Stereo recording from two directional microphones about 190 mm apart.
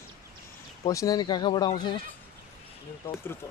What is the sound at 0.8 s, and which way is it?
A man's voice, 20° left (ahead or behind).